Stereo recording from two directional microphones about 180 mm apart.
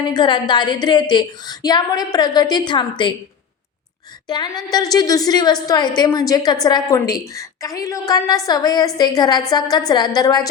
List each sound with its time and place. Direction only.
0.1 s a woman's voice: 25° left (ahead or behind)
4.3 s a woman's voice: 20° left (ahead or behind)